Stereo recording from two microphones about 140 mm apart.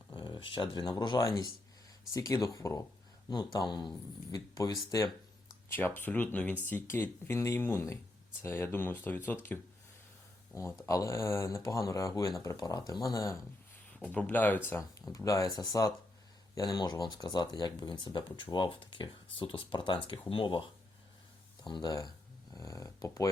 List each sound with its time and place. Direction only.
0.1 s speech: 35° left (ahead or behind)
5.6 s speech: 15° left (ahead or behind)
14.0 s speech: 10° left (ahead or behind); by 20.7 s 35° left (ahead or behind)
21.7 s speech: 30° left (ahead or behind)